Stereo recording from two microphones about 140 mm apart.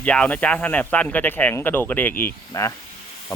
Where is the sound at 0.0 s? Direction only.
10° left (ahead or behind).